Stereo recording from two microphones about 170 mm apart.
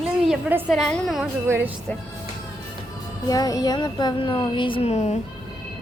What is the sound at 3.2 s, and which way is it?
Speech, 20° left (ahead or behind).